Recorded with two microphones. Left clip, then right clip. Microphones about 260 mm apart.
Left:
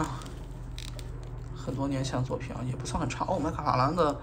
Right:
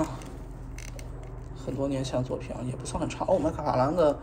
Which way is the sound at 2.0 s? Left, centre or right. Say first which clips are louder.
Right 2 dB; left.